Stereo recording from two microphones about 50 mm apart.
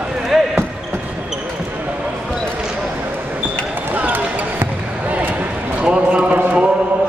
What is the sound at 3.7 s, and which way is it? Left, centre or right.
Basketball bounce, right.